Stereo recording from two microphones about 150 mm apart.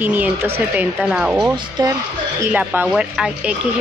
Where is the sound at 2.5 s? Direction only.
10° right (ahead or behind).